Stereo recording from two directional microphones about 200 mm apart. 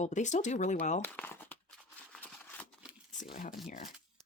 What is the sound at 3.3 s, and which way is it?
Speech, 45° left (ahead or behind).